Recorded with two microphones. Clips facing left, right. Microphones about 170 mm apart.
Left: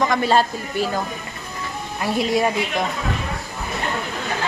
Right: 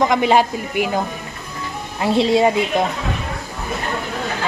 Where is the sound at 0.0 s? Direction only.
20° right (ahead or behind).